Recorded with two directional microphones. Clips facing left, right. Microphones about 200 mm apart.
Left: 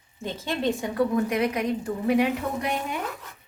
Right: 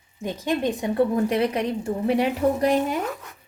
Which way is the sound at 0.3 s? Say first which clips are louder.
Right 3 dB; 15° right (ahead or behind).